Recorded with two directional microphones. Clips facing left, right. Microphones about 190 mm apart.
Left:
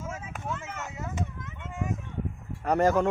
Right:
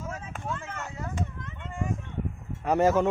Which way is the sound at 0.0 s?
5° left (ahead or behind).